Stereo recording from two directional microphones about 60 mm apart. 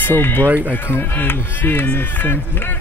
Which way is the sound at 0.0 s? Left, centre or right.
Left.